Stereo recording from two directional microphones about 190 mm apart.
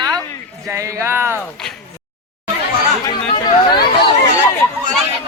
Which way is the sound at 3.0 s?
20° left (ahead or behind).